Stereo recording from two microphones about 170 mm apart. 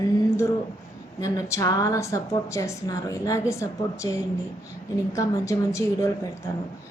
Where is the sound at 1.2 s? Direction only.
20° left (ahead or behind).